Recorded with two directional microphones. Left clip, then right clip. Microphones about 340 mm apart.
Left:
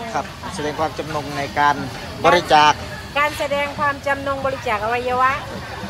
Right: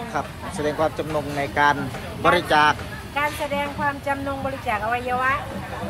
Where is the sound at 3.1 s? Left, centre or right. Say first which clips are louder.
Left 5 dB; left.